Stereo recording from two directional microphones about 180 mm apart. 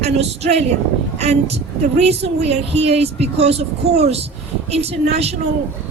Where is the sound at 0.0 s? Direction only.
35° right (ahead or behind).